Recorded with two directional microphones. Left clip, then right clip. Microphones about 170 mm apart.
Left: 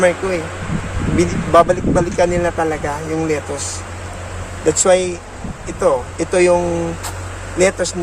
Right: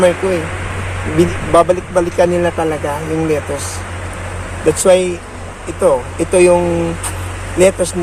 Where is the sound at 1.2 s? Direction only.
20° left (ahead or behind).